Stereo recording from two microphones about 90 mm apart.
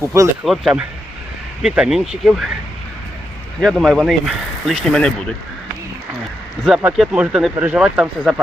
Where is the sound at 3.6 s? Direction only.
Centre (ahead or behind).